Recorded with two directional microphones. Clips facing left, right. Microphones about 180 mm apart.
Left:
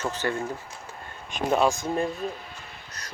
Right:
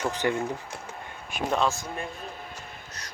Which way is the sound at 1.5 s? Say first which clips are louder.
Left 4 dB; 10° left (ahead or behind).